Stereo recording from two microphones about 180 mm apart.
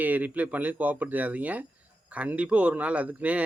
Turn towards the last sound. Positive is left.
turn(degrees=-10)  # may be behind; listen again after turning